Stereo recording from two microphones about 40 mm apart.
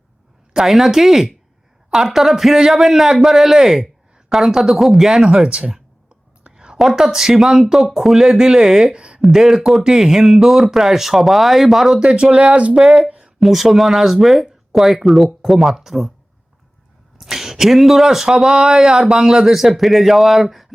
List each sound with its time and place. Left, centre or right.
0.6 s speech: centre
5.5 s speech: right
6.4 s whispering: right
6.7 s speech: centre
8.9 s speech: right
9.3 s speech: centre
11.9 s speech: right
12.9 s a sound: right
13.4 s speech: centre
17.2 s speech: centre